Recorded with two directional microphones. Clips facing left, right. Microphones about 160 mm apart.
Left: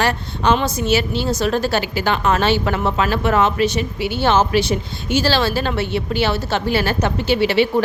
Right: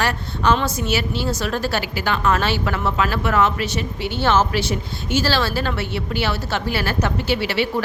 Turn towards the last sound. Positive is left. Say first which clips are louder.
# left 5 dB
turn(degrees=20)  # may be behind; listen again after turning